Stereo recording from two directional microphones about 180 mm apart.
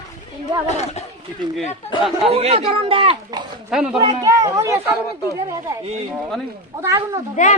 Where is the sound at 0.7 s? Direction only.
40° left (ahead or behind).